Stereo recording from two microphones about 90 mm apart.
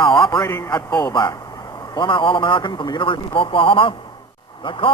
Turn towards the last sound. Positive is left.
turn(degrees=75)  # may be behind; listen again after turning